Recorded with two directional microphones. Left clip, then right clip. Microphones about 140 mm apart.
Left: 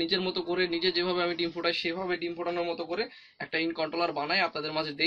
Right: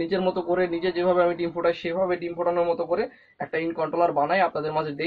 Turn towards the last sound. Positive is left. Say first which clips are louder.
# right 5 dB
turn(degrees=15)  # may be behind; listen again after turning